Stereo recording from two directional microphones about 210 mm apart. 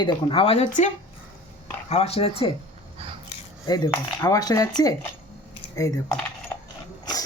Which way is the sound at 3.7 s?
20° left (ahead or behind).